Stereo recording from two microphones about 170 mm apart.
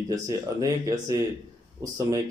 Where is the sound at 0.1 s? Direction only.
20° right (ahead or behind).